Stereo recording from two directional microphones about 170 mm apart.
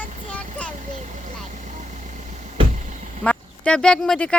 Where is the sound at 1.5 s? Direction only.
45° right (ahead or behind).